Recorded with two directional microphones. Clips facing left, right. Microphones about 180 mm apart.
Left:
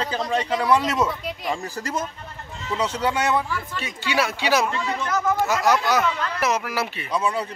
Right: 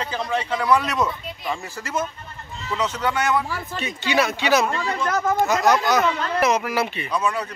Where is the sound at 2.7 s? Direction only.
30° left (ahead or behind).